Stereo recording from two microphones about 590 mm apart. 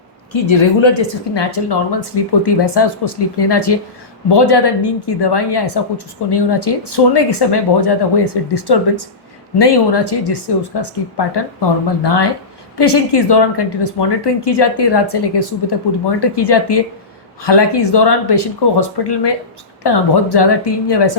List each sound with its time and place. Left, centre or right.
0.3 s speech: left